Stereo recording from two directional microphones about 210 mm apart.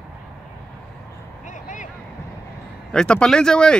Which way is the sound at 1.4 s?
35° left (ahead or behind).